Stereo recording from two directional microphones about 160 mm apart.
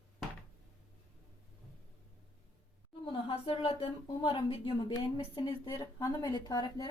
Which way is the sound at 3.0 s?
35° left (ahead or behind).